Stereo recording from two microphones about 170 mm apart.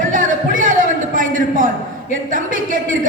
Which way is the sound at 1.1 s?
50° right (ahead or behind).